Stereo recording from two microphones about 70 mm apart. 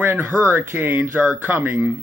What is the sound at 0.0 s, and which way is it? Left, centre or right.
Speech, right.